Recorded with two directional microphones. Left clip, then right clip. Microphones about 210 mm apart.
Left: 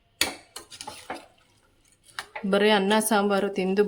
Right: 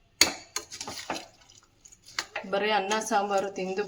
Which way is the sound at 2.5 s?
60° left (ahead or behind).